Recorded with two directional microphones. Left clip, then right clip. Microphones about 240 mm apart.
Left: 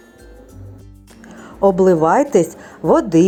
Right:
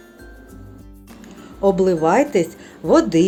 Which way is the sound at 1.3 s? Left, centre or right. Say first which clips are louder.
Left 3 dB; centre.